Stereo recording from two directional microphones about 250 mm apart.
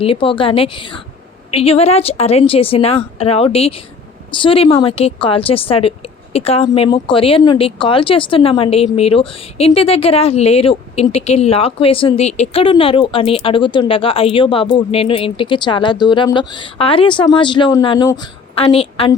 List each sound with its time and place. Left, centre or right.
0.0 s speech: left